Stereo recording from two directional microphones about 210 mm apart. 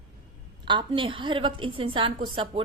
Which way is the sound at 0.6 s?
20° right (ahead or behind).